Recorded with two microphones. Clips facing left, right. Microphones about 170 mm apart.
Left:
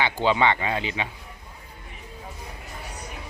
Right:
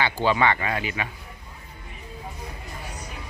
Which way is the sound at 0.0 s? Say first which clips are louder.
Even; 15° left (ahead or behind).